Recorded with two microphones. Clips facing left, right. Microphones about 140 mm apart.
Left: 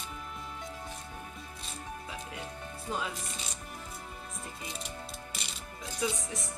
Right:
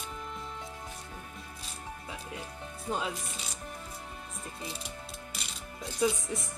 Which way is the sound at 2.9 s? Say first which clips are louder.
Right 2 dB; 20° right (ahead or behind).